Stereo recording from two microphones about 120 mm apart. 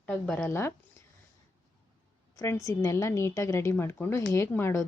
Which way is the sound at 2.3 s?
25° left (ahead or behind).